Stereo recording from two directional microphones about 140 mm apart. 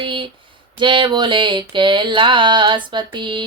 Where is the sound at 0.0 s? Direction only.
35° right (ahead or behind).